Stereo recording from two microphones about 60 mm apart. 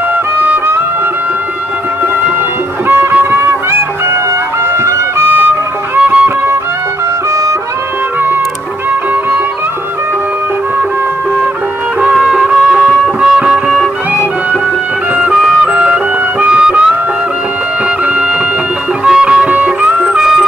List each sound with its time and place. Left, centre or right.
2.9 s music: right
5.9 s music: right
12.0 s music: centre
15.1 s music: centre
19.0 s music: centre
19.5 s music: right
20.0 s music: centre